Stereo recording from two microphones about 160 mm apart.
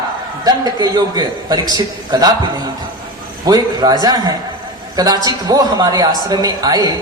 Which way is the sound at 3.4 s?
25° right (ahead or behind).